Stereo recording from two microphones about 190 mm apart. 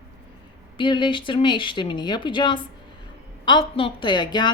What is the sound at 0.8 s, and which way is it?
A woman's voice, 25° left (ahead or behind).